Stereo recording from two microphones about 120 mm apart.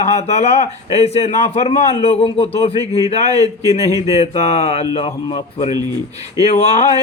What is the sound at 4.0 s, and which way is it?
A man's voice, 60° left (ahead or behind).